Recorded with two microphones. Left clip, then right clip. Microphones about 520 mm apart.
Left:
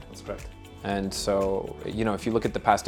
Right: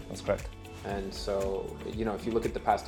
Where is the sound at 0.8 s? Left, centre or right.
Left.